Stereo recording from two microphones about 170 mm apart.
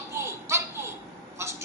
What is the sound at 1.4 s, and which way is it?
Vehicle, 15° right (ahead or behind).